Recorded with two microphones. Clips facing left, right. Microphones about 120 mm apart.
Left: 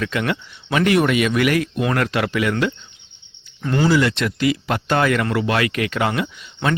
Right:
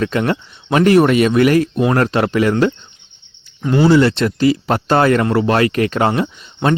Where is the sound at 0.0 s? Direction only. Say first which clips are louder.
Right 5 dB; 35° right (ahead or behind).